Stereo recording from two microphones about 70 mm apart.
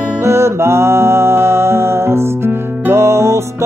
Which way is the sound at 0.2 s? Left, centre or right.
Right.